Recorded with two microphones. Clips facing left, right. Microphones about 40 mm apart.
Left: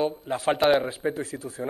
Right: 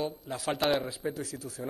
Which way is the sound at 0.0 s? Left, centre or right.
Left.